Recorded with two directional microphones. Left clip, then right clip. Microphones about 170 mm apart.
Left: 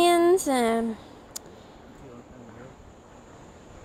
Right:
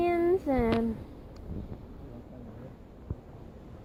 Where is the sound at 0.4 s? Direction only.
80° left.